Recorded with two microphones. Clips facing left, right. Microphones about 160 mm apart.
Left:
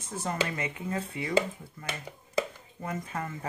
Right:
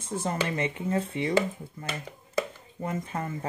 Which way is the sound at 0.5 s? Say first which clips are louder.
Right 5 dB; 30° right (ahead or behind).